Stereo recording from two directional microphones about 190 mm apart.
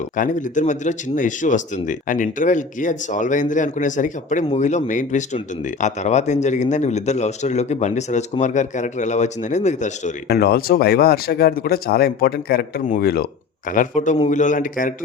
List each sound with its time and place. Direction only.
0.2 s speech: 40° left (ahead or behind)
10.2 s speech: 55° left (ahead or behind)
13.7 s speech: 40° left (ahead or behind)